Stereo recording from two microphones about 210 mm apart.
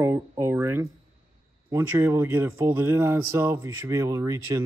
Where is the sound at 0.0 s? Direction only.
10° right (ahead or behind).